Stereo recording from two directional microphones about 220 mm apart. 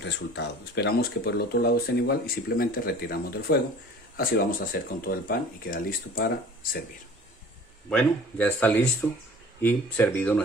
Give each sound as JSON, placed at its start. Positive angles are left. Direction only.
{"t": 0.0, "sound": "speech", "side_deg": 50}
{"t": 7.9, "sound": "speech", "side_deg": 5}